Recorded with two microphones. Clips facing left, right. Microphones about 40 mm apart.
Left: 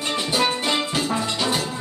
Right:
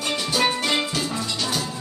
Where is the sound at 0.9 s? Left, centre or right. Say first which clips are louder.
Left 3 dB; left.